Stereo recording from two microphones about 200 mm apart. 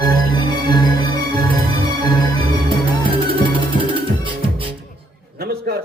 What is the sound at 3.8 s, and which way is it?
Music, 25° right (ahead or behind).